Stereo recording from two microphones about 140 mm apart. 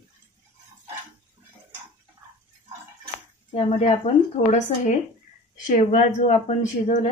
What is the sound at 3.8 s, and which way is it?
Speech, 55° left (ahead or behind).